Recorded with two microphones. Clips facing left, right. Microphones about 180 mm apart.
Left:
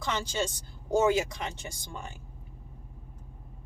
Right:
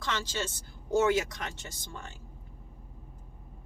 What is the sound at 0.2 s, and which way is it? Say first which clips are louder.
Speech: left 4 dB; 15° left (ahead or behind).